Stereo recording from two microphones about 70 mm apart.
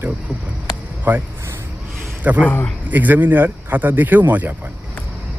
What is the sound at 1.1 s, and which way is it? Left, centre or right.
Speech, right.